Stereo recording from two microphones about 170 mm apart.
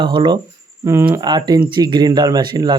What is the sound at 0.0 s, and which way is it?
Speech, 30° right (ahead or behind).